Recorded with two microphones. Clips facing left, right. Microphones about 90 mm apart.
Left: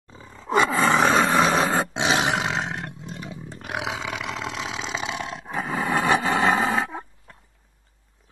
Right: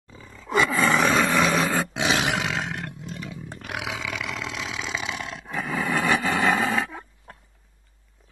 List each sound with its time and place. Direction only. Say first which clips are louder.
0.1 s roar: left 3 dB; 30° left (ahead or behind)